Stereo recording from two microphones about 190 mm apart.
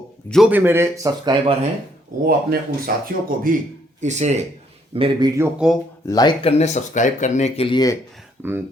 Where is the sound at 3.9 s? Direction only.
40° right (ahead or behind).